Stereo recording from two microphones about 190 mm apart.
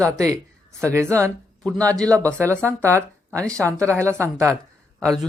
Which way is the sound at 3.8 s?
15° right (ahead or behind).